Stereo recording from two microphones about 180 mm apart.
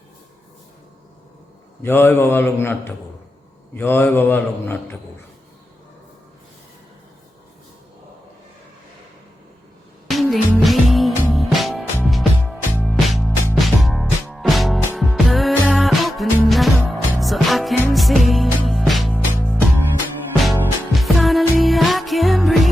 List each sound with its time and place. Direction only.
1.8 s a man's voice: 10° left (ahead or behind)
10.1 s music: centre (ahead or behind)